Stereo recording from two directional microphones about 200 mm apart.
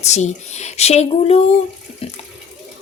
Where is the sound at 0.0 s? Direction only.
35° left (ahead or behind).